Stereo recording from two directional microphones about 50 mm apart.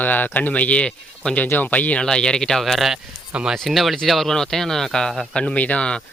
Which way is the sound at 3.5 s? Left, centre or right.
Centre.